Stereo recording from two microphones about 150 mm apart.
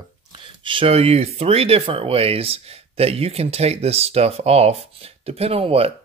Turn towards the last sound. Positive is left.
turn(degrees=-40)  # may be behind; listen again after turning